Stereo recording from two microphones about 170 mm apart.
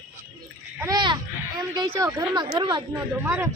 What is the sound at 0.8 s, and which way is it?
Speech, 25° right (ahead or behind).